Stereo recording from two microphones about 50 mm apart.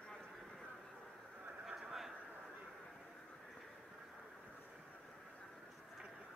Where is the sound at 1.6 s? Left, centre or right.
Centre.